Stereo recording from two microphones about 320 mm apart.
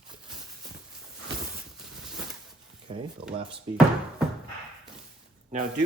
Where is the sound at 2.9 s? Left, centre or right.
Centre.